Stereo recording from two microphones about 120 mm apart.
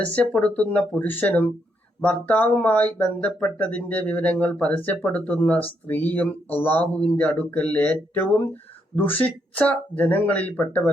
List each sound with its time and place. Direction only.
0.0 s speech: 10° left (ahead or behind)